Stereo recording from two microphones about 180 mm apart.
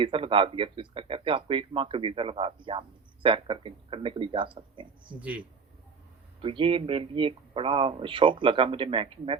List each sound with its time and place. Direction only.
0.0 s speech: 30° right (ahead or behind)
5.2 s speech: 5° right (ahead or behind)
6.4 s speech: 30° right (ahead or behind)